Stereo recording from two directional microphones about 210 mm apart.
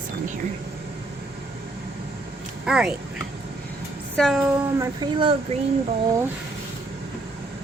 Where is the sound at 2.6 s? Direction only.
5° right (ahead or behind).